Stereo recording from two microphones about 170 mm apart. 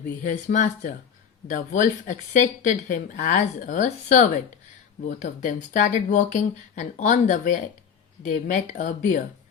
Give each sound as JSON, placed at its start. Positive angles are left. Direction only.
{"t": 0.2, "sound": "speech", "side_deg": 45}